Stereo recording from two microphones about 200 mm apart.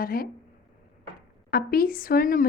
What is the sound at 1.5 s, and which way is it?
Speech, 45° left (ahead or behind).